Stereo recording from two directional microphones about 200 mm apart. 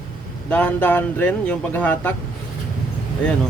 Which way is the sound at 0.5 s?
10° left (ahead or behind).